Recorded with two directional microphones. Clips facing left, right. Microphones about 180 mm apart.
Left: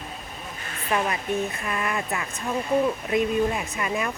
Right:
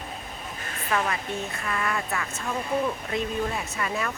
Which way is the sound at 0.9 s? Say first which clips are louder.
Left 2 dB; 20° left (ahead or behind).